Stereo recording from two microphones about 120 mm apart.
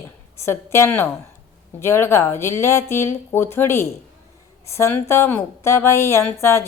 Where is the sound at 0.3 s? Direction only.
20° left (ahead or behind).